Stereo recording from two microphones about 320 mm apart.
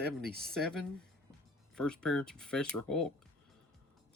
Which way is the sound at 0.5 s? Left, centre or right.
Centre.